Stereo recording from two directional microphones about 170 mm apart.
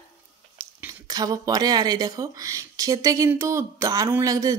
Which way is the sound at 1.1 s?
20° right (ahead or behind).